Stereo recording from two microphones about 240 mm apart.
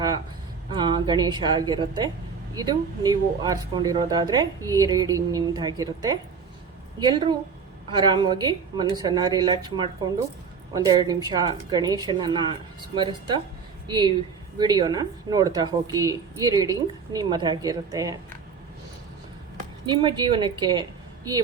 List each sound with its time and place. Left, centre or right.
0.7 s speech: centre
19.8 s speech: centre